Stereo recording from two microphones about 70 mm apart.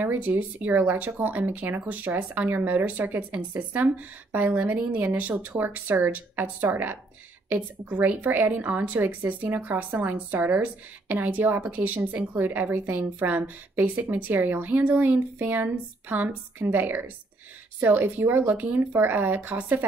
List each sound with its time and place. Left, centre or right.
0.0 s speech: right